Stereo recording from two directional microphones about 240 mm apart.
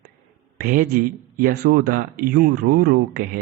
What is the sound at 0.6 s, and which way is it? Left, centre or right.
Speech, right.